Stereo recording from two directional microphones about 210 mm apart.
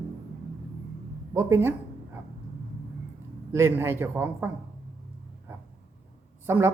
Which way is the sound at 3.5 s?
10° right (ahead or behind).